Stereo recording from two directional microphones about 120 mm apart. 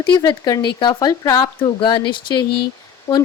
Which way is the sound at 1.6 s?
40° left (ahead or behind).